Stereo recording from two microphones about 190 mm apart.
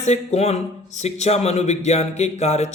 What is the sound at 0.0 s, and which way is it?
Speech, 35° left (ahead or behind).